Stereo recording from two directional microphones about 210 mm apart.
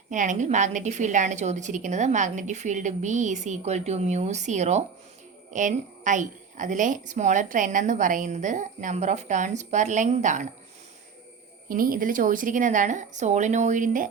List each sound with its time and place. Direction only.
0.1 s a woman's voice: 35° right (ahead or behind)
11.7 s a woman's voice: 40° right (ahead or behind)